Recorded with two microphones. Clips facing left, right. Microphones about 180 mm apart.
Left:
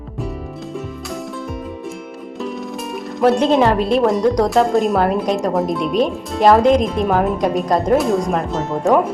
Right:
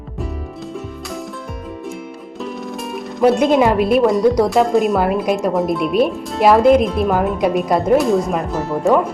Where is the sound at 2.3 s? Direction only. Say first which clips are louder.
Left 1 dB; centre (ahead or behind).